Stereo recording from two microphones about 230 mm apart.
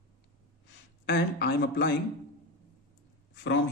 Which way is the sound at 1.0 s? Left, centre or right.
Left.